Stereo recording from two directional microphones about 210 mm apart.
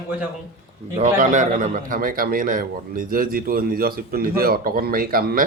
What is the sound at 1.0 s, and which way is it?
A man's voice, 35° right (ahead or behind).